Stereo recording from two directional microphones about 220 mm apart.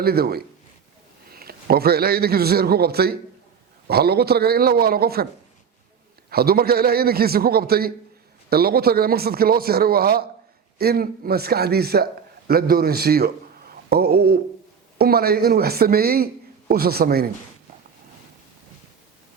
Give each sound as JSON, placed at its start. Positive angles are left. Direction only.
{"t": 0.0, "sound": "a man's voice", "side_deg": -45}
{"t": 6.3, "sound": "a man's voice", "side_deg": -45}